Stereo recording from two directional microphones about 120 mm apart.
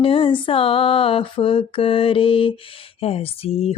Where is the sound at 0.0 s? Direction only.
50° left (ahead or behind).